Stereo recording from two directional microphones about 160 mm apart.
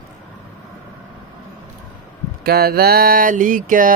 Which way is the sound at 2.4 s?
75° right (ahead or behind).